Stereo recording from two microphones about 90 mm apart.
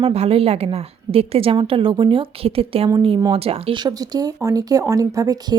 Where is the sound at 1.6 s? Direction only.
80° right.